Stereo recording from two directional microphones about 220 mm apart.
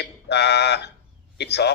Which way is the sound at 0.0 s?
50° left (ahead or behind).